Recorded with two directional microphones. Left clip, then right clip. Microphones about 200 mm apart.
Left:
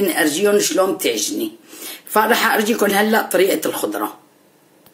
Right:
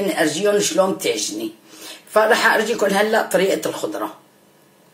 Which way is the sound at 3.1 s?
40° left (ahead or behind).